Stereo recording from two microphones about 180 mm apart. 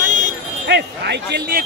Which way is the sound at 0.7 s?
70° right (ahead or behind).